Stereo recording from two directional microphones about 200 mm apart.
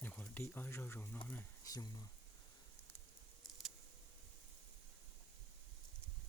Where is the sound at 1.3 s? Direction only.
15° left (ahead or behind).